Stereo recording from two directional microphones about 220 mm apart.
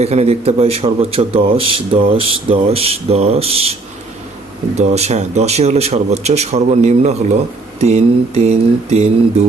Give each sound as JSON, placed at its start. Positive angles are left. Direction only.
{"t": 0.0, "sound": "a man's voice", "side_deg": -30}